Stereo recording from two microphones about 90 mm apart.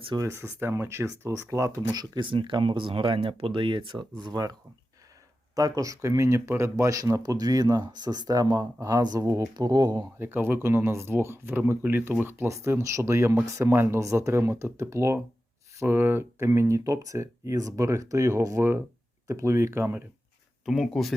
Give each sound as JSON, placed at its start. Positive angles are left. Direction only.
{"t": 0.2, "sound": "speech", "side_deg": -30}
{"t": 1.9, "sound": "speech", "side_deg": -55}
{"t": 4.2, "sound": "speech", "side_deg": -50}
{"t": 5.5, "sound": "speech", "side_deg": -40}
{"t": 10.2, "sound": "speech", "side_deg": -25}
{"t": 20.7, "sound": "speech", "side_deg": 0}